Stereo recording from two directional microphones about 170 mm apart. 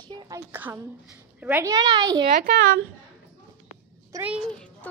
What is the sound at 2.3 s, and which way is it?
Speech, 70° right (ahead or behind).